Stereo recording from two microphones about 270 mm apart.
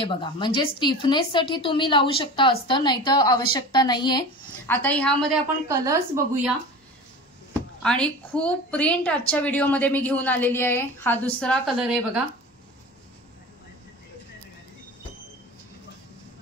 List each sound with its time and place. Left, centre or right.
0.0 s a woman's voice: centre
5.7 s a woman's voice: centre
7.8 s a woman's voice: centre